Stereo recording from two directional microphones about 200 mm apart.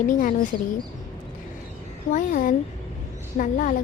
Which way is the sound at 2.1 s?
40° left (ahead or behind).